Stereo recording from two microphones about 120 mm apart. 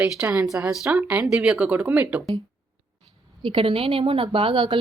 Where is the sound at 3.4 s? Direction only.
45° right (ahead or behind).